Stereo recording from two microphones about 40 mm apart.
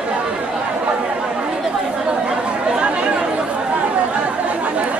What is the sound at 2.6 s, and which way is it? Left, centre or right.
Speech, right.